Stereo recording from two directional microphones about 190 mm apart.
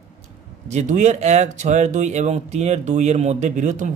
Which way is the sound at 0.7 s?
40° right (ahead or behind).